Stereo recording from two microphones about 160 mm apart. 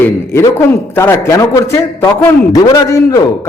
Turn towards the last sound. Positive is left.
turn(degrees=20)  # may be behind; listen again after turning